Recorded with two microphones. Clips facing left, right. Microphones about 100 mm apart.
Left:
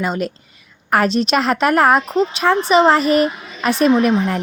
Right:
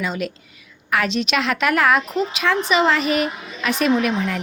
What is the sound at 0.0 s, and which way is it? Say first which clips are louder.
A woman's voice: left 4 dB; 40° left (ahead or behind).